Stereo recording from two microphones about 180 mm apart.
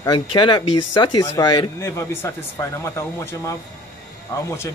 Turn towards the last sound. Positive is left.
turn(degrees=15)  # may be behind; listen again after turning